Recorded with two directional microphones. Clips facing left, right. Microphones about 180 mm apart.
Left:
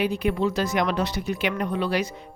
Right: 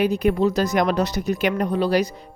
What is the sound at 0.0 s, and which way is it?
Speech, 40° right (ahead or behind).